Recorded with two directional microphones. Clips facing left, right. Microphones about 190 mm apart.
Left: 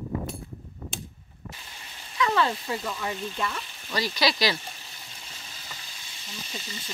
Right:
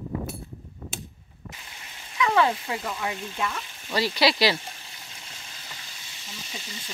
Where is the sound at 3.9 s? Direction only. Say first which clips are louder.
Right 3 dB; 30° right (ahead or behind).